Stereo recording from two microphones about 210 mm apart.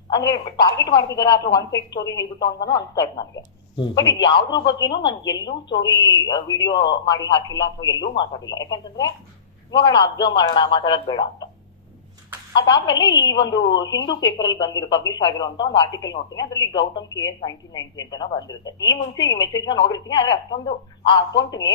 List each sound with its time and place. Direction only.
0.1 s speech: 15° left (ahead or behind)
12.5 s speech: 20° left (ahead or behind)
13.7 s speech: 60° left (ahead or behind)
14.4 s speech: 20° left (ahead or behind)